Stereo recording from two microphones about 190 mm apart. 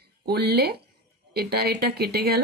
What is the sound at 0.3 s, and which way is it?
Speech, 55° right (ahead or behind).